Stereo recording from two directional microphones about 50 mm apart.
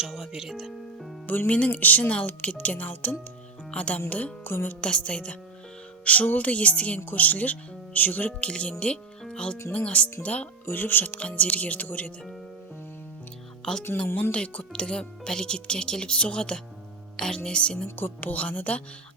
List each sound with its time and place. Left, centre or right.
0.0 s speech: centre
1.3 s speech: left
4.5 s speech: left
4.8 s speech: left
8.4 s speech: left
10.7 s speech: left
11.2 s speech: left
13.7 s speech: centre
14.2 s speech: left
17.8 s speech: left